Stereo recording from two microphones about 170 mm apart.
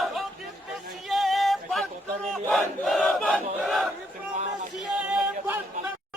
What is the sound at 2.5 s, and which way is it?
Battle cry, centre (ahead or behind).